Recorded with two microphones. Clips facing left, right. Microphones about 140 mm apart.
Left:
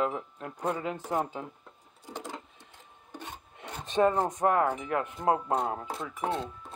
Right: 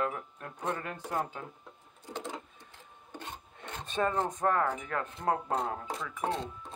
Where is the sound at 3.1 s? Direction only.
15° left (ahead or behind).